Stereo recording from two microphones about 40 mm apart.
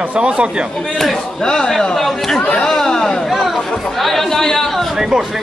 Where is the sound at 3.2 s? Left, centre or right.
Centre.